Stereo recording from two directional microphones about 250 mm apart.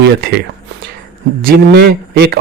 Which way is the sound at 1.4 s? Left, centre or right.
Right.